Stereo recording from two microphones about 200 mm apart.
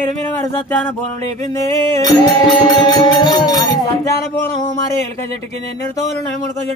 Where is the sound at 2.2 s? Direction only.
20° left (ahead or behind).